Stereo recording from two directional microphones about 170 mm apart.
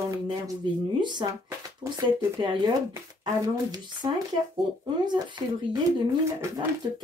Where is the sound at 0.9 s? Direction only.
25° right (ahead or behind).